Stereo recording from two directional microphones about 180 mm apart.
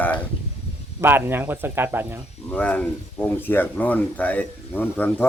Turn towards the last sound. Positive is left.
turn(degrees=10)  # may be behind; listen again after turning